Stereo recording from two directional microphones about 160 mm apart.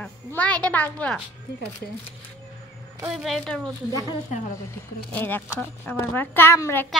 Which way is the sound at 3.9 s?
25° left (ahead or behind).